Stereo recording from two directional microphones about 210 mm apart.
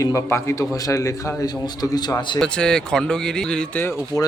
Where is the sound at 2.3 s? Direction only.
5° left (ahead or behind).